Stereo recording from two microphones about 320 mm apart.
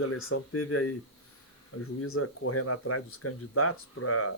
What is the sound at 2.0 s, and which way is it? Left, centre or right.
Speech, left.